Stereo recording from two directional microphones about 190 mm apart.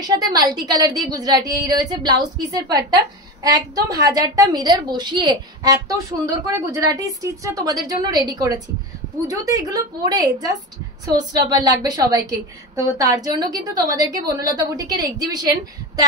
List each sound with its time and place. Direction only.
0.0 s a woman's voice: 20° right (ahead or behind)